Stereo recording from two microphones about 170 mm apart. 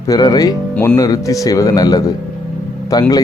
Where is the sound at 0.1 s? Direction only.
20° left (ahead or behind).